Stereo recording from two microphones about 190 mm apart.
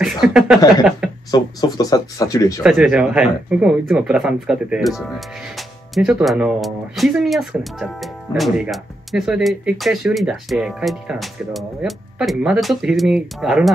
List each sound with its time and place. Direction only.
0.0 s a sound: centre (ahead or behind)
1.3 s speech: 20° left (ahead or behind)
2.6 s speech: 5° right (ahead or behind)